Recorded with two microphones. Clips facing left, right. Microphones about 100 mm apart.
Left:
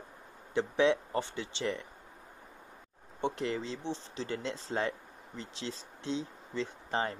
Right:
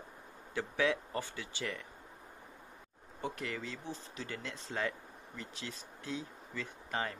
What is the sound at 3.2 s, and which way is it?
Speech, 25° left (ahead or behind).